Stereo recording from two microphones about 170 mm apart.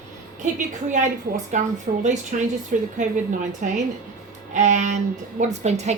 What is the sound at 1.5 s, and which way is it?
A woman's voice, 45° right (ahead or behind).